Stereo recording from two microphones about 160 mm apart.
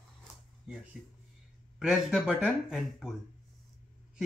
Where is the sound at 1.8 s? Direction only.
5° right (ahead or behind).